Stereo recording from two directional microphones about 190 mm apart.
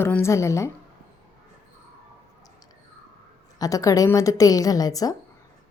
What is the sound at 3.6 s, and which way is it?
A woman's voice, 20° left (ahead or behind).